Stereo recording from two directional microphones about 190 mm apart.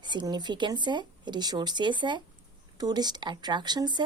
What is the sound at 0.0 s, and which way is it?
Speech, 25° right (ahead or behind).